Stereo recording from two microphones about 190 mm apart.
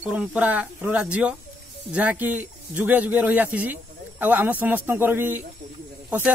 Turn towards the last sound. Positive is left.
turn(degrees=-10)  # may be behind; listen again after turning